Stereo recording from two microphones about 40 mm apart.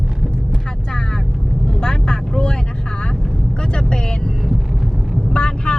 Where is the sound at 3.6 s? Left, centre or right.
Centre.